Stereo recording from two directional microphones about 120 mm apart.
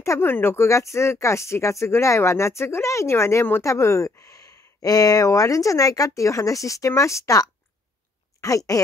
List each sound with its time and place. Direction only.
0.0 s speech: 20° left (ahead or behind)